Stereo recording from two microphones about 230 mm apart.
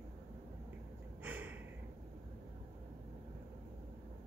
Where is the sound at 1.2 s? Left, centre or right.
Centre.